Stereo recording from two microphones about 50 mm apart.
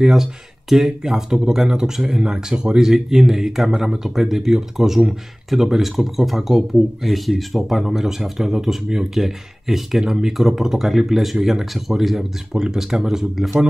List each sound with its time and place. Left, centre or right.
0.0 s speech: centre